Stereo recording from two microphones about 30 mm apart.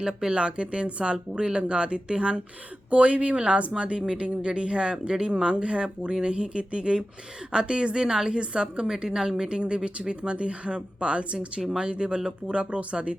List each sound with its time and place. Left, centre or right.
0.0 s a woman's voice: right
0.3 s speech: right
2.9 s a woman's voice: right
9.0 s a woman's voice: centre
9.6 s speech: right